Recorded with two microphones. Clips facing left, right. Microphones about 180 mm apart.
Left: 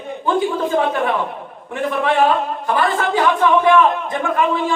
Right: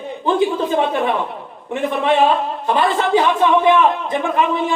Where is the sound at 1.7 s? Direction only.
20° right (ahead or behind).